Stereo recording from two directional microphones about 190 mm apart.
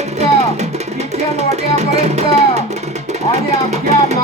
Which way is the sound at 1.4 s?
35° right (ahead or behind).